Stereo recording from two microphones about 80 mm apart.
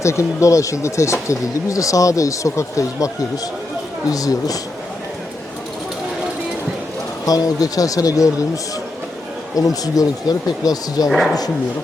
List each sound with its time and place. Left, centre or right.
0.0 s speech: left
4.1 s speech: left
7.3 s speech: left
9.6 s speech: left